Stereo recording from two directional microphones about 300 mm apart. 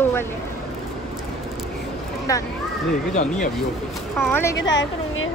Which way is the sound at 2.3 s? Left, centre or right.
Centre.